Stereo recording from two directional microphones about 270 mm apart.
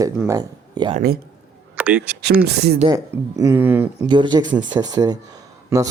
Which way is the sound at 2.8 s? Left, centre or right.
Centre.